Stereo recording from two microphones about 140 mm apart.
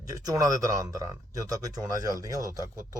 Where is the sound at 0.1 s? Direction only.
25° right (ahead or behind).